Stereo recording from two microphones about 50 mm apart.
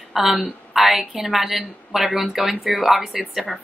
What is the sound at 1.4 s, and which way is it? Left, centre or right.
Speech, centre.